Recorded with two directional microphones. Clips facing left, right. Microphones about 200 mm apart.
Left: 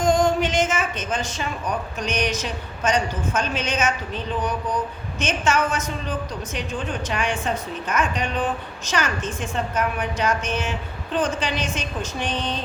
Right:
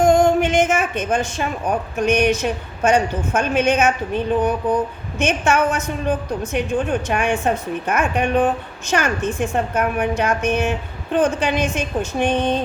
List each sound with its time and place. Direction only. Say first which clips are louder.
0.0 s a woman's voice: right 5 dB; 55° right (ahead or behind)